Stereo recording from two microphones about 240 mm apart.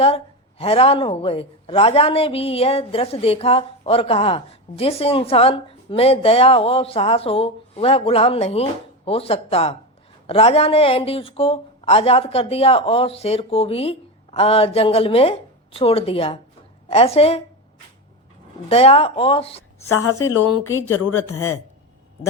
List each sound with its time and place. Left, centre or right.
0.6 s a woman's voice: left
18.7 s a woman's voice: left
19.9 s a woman's voice: left